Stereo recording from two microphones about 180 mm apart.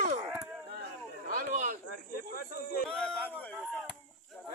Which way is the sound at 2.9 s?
5° left (ahead or behind).